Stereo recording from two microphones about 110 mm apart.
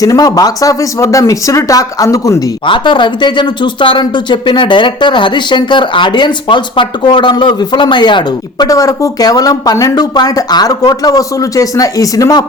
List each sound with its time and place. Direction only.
0.0 s speech: 35° left (ahead or behind)
2.6 s speech: 50° left (ahead or behind)
8.6 s speech: 30° left (ahead or behind)